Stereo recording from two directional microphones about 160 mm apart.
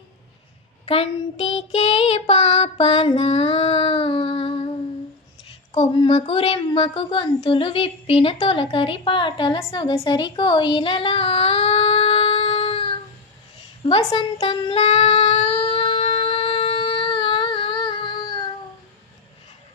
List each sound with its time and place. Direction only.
0.9 s a woman's voice: 40° left (ahead or behind)
3.2 s female singing: 40° left (ahead or behind)
5.8 s a woman's voice: 30° left (ahead or behind)
14.1 s child singing: 30° left (ahead or behind)